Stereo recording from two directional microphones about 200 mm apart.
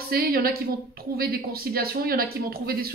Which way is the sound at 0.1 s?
50° right (ahead or behind).